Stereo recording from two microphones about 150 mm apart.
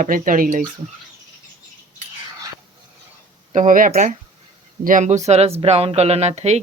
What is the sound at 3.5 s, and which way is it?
Speech, 60° right (ahead or behind).